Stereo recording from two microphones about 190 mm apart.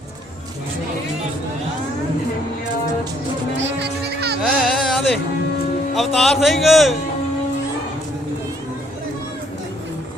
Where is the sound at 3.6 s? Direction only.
70° right (ahead or behind).